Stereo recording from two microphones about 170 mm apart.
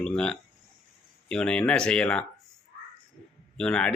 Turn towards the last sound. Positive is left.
turn(degrees=5)  # may be behind; listen again after turning